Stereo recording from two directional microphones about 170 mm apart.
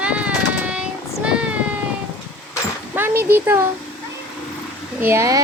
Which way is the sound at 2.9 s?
10° right (ahead or behind).